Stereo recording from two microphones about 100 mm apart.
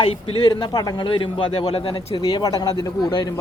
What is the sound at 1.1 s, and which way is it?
Speech, 55° left (ahead or behind).